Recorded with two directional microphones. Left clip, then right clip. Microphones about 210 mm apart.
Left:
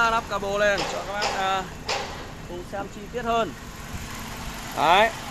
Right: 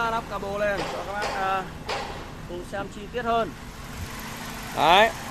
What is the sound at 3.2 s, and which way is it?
Speech, 20° left (ahead or behind).